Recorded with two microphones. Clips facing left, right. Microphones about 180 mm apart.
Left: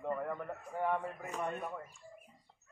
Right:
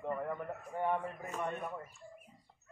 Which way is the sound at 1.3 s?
5° left (ahead or behind).